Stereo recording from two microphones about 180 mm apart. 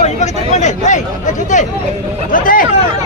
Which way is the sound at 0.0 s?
40° left (ahead or behind).